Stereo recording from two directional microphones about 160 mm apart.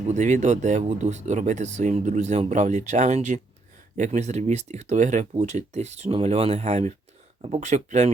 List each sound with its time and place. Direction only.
0.1 s speech: 50° right (ahead or behind)